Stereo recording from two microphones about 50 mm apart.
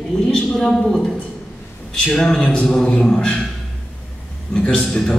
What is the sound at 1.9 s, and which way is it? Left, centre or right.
A man's voice, centre.